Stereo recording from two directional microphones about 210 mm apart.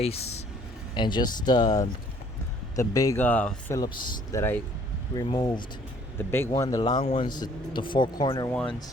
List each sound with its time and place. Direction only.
0.0 s speech: 30° left (ahead or behind)